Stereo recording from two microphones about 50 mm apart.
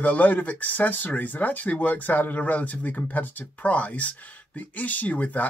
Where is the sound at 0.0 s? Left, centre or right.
Left.